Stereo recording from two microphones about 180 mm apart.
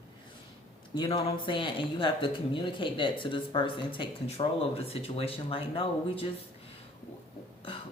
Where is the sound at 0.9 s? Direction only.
25° left (ahead or behind).